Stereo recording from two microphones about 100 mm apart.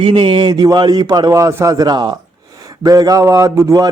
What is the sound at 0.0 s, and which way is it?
A man's voice, 60° right (ahead or behind).